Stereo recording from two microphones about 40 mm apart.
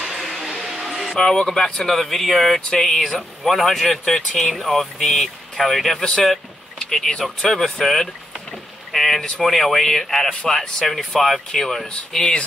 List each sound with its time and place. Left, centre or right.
0.0 s a sound: centre
1.1 s speech: centre
5.9 s speech: left
8.9 s a sound: centre
9.4 s speech: centre
10.9 s speech: centre
12.2 s speech: left